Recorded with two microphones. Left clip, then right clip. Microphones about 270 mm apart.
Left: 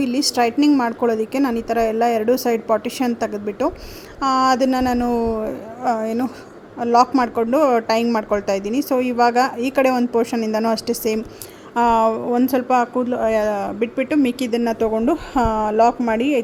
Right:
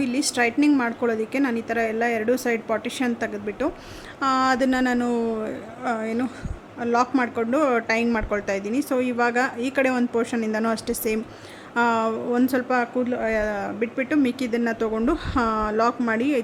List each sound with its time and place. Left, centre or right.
0.0 s a woman's voice: centre
14.3 s speech: centre
14.5 s a woman's voice: centre